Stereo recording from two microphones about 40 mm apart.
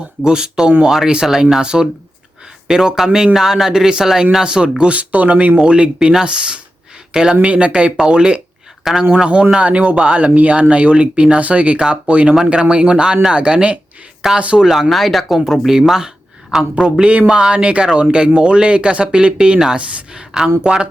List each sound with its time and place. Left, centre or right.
0.2 s speech: centre
2.6 s speech: centre
4.8 s speech: right
6.0 s speech: centre
7.4 s speech: right
8.8 s speech: centre
9.1 s speech: right
11.8 s speech: right
14.6 s speech: centre
15.9 s a man's voice: centre